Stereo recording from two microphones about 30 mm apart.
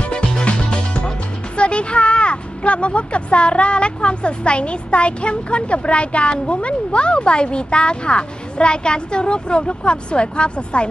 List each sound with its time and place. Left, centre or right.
0.1 s music: left
1.6 s speech: left